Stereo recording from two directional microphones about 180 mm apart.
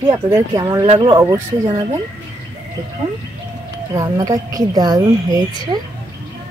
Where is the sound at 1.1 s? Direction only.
20° right (ahead or behind).